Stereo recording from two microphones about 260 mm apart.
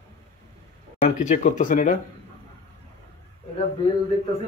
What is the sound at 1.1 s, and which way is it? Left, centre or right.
Speech, left.